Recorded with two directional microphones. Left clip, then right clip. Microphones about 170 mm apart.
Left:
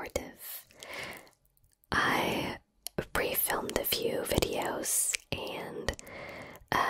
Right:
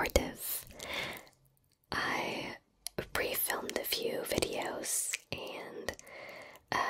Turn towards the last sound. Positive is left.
turn(degrees=25)  # may be behind; listen again after turning